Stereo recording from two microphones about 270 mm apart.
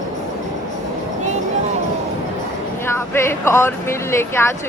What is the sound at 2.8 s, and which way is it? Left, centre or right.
Speech, centre.